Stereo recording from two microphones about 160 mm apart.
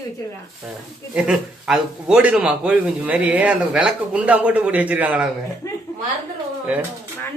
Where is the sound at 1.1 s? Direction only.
5° right (ahead or behind).